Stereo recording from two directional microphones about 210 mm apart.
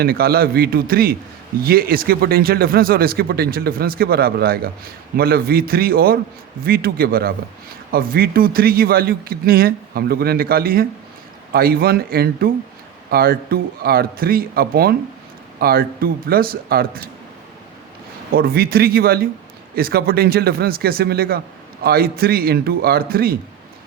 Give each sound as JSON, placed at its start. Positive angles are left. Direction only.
{"t": 0.0, "sound": "a man's voice", "side_deg": -45}
{"t": 18.3, "sound": "a man's voice", "side_deg": -45}